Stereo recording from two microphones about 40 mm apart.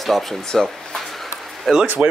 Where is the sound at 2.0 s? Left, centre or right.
Right.